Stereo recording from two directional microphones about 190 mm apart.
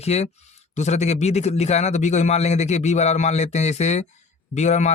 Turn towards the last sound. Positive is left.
turn(degrees=40)  # may be behind; listen again after turning